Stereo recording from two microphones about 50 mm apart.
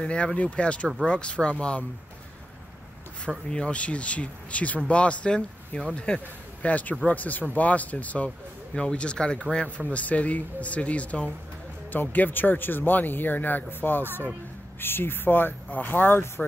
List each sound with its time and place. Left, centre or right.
0.0 s speech: left
3.4 s speech: centre
11.9 s speech: left